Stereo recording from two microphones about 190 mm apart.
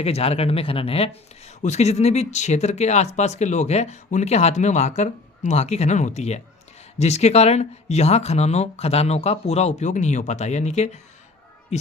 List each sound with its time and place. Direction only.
0.0 s speech: 30° left (ahead or behind)